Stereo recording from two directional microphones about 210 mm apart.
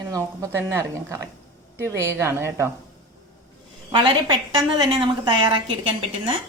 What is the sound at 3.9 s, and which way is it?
A woman's voice, 25° right (ahead or behind).